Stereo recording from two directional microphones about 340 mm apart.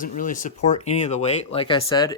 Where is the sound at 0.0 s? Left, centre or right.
Left.